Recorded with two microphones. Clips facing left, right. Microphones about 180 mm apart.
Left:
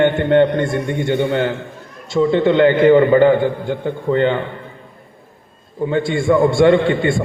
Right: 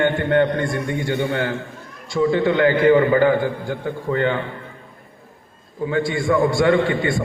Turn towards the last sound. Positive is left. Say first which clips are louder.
# left 4 dB
turn(degrees=25)  # may be behind; listen again after turning